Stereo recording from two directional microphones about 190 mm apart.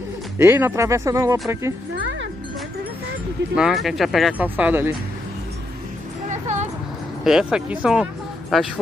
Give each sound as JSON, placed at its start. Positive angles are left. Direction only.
{"t": 0.4, "sound": "speech", "side_deg": -10}
{"t": 3.5, "sound": "speech", "side_deg": 0}
{"t": 6.3, "sound": "a sound", "side_deg": -40}
{"t": 7.5, "sound": "speech", "side_deg": -5}